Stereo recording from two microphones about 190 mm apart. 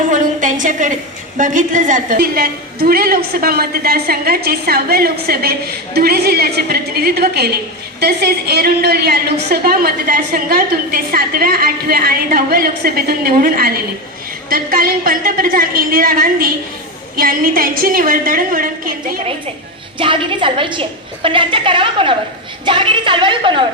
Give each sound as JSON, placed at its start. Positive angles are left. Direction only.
{"t": 0.1, "sound": "a sound", "side_deg": -40}
{"t": 1.4, "sound": "a woman's voice", "side_deg": -40}
{"t": 20.0, "sound": "a woman's voice", "side_deg": -25}